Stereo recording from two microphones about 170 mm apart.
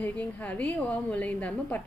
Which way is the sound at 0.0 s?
10° left (ahead or behind).